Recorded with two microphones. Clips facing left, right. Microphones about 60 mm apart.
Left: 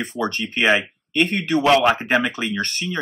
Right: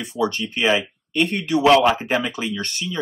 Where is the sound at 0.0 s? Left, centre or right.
Left.